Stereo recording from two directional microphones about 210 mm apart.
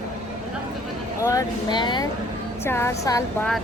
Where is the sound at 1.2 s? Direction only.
15° left (ahead or behind).